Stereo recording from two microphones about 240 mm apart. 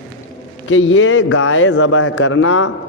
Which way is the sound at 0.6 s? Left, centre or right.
Left.